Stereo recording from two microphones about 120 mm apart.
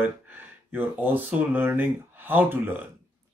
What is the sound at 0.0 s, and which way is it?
Speech, 15° right (ahead or behind).